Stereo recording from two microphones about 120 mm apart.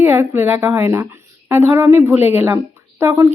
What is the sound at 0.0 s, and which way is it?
Speech, 20° right (ahead or behind).